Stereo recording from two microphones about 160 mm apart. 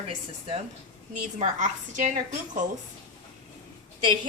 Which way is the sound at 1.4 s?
50° right (ahead or behind).